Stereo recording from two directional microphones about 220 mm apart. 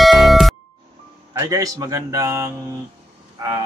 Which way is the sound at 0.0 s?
Centre (ahead or behind).